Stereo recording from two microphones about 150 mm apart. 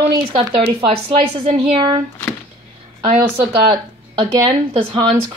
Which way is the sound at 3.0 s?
35° right (ahead or behind).